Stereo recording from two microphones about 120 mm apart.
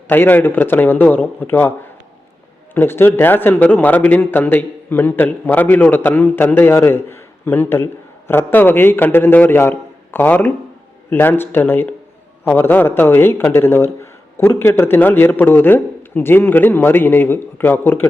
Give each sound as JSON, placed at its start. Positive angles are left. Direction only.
{"t": 0.1, "sound": "a man's voice", "side_deg": 15}